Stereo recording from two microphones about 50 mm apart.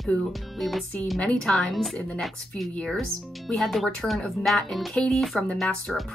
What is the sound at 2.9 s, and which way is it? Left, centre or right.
Speech, centre.